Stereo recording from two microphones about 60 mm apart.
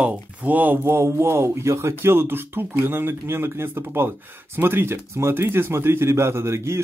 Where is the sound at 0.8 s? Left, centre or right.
Right.